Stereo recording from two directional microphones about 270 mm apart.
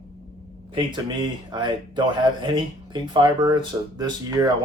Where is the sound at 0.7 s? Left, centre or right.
Centre.